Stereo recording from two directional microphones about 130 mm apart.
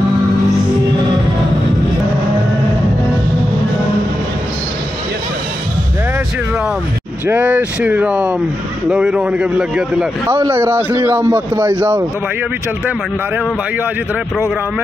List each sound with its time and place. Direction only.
7.2 s a man's voice: 10° right (ahead or behind)
10.2 s a man's voice: 20° right (ahead or behind)